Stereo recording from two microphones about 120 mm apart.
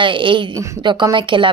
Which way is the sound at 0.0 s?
45° right (ahead or behind).